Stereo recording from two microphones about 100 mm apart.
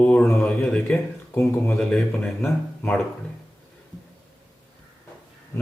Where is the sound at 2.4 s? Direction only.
15° left (ahead or behind).